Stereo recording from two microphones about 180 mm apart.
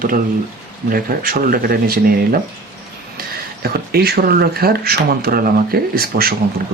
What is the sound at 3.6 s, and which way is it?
Speech, 60° right (ahead or behind).